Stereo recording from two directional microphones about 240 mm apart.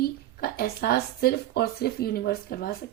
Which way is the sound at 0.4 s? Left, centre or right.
Left.